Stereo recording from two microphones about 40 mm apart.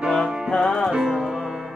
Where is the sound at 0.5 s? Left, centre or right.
Centre.